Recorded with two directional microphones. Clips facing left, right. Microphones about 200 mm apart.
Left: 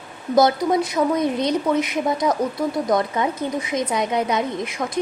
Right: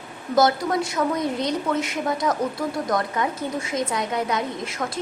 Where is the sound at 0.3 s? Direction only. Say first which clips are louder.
Left 3 dB; 20° left (ahead or behind).